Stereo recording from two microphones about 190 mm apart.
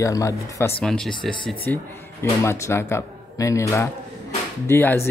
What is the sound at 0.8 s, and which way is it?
Speech, 5° left (ahead or behind).